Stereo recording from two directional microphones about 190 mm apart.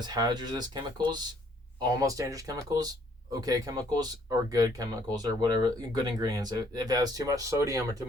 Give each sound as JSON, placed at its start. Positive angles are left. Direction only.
{"t": 0.0, "sound": "speech", "side_deg": -20}